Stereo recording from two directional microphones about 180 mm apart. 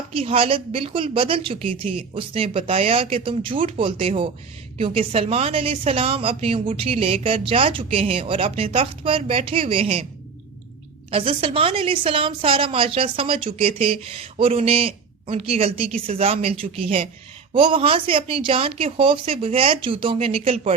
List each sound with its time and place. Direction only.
0.1 s a woman's voice: 30° right (ahead or behind)
11.1 s a woman's voice: 30° right (ahead or behind)